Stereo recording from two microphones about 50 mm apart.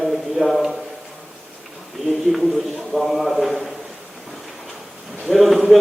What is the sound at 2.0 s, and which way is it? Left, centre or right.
A man's voice, centre.